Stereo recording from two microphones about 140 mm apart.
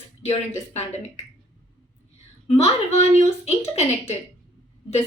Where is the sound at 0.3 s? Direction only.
50° left (ahead or behind).